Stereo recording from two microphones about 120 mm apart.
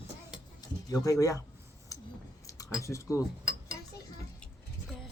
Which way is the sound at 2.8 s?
25° left (ahead or behind).